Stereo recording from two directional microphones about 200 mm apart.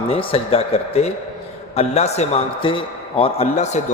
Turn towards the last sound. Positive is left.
turn(degrees=35)  # may be behind; listen again after turning